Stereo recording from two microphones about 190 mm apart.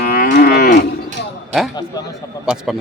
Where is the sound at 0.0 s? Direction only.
50° left (ahead or behind).